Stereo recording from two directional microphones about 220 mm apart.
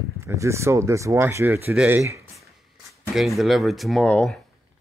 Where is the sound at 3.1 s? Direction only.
Centre (ahead or behind).